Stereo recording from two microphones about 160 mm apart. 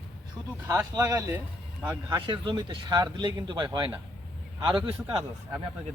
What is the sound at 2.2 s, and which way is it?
Speech, 30° right (ahead or behind).